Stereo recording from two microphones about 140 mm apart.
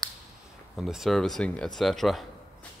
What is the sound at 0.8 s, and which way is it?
Speech, centre (ahead or behind).